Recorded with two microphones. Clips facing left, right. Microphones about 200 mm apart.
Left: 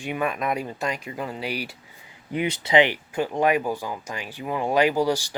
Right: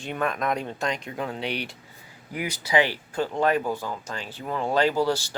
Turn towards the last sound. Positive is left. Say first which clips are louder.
# left 1 dB
turn(degrees=15)  # may be behind; listen again after turning